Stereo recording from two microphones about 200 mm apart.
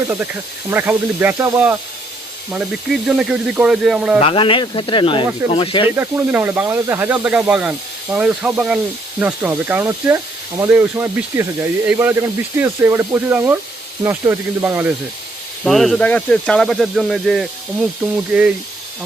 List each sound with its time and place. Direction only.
0.7 s speech: 10° right (ahead or behind)
4.2 s speech: 25° left (ahead or behind)
6.0 s speech: 10° right (ahead or behind)
15.6 s speech: centre (ahead or behind)